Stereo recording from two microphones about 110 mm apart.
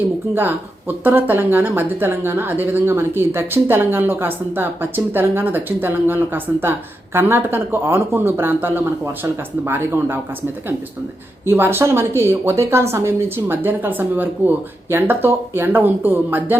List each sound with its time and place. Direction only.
0.3 s speech: 15° right (ahead or behind)
11.4 s speech: 20° right (ahead or behind)